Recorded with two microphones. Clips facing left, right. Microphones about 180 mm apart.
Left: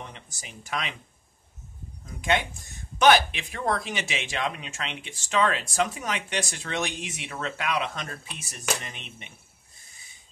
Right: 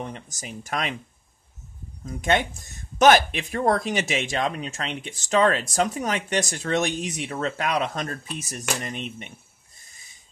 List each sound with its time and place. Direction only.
0.0 s speech: 45° right (ahead or behind)
2.0 s speech: 45° right (ahead or behind)